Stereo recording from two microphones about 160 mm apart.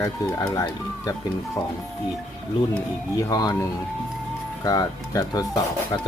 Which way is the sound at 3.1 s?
25° left (ahead or behind).